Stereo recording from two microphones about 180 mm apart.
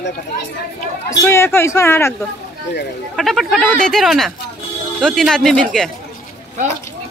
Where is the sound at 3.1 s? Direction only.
Centre (ahead or behind).